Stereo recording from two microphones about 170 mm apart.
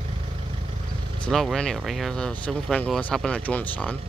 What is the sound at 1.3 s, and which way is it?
Speech, centre (ahead or behind).